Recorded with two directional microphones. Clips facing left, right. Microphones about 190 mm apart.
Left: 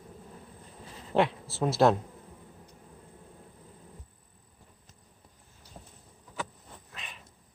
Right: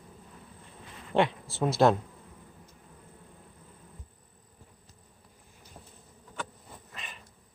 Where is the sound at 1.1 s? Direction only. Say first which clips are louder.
Even; centre (ahead or behind).